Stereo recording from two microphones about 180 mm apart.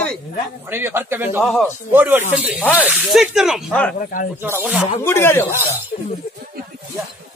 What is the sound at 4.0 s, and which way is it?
Speech, 50° left (ahead or behind).